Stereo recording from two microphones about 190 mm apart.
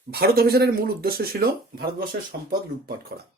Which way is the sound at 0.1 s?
55° right (ahead or behind).